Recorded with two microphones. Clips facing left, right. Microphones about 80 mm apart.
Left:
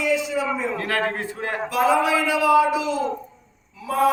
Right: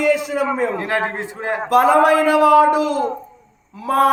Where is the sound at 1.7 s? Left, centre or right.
Right.